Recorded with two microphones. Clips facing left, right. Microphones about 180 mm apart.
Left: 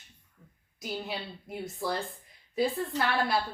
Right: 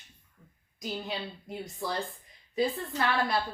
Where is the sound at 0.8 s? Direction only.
5° left (ahead or behind).